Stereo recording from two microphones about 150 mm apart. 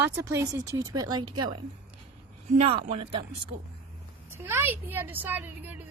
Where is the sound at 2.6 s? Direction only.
40° right (ahead or behind).